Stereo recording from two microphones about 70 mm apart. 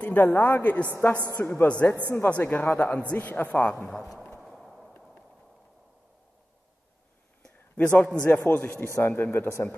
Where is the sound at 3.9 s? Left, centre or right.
Centre.